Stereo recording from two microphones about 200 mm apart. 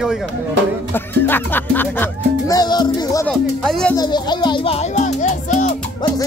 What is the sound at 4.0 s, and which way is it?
Speech, 20° left (ahead or behind).